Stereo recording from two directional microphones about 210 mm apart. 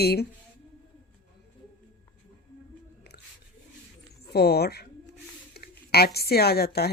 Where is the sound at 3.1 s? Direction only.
50° left (ahead or behind).